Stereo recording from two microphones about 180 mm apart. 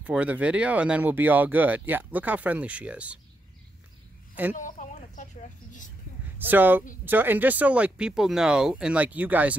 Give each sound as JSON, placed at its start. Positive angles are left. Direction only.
{"t": 0.0, "sound": "speech", "side_deg": -10}
{"t": 4.6, "sound": "a sound", "side_deg": 45}
{"t": 6.3, "sound": "speech", "side_deg": -10}